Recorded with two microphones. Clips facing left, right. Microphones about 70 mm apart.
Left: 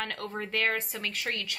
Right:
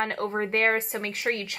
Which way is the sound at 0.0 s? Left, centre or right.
Right.